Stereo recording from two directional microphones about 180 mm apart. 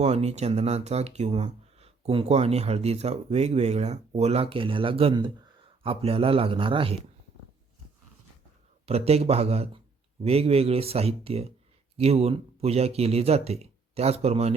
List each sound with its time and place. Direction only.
0.0 s speech: 35° right (ahead or behind)
8.9 s speech: 35° right (ahead or behind)